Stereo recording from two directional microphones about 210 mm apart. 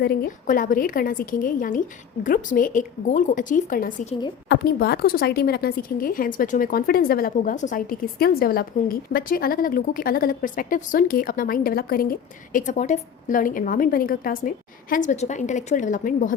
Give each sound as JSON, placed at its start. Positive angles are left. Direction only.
{"t": 0.0, "sound": "a woman's voice", "side_deg": 50}
{"t": 4.4, "sound": "a woman's voice", "side_deg": 50}